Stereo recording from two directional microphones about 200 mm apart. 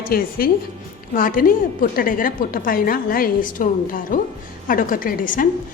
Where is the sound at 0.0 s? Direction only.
45° left (ahead or behind).